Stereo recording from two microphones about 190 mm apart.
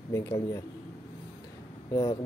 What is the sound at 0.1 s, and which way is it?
Speech, 15° left (ahead or behind).